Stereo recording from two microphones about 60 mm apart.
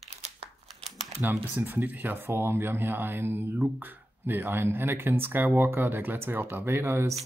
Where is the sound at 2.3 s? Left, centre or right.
Right.